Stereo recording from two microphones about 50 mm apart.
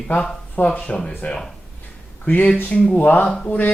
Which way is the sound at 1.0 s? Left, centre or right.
Centre.